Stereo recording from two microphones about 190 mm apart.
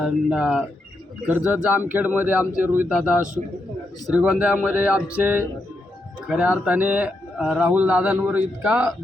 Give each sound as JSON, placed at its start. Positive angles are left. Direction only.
{"t": 0.0, "sound": "a man's voice", "side_deg": -5}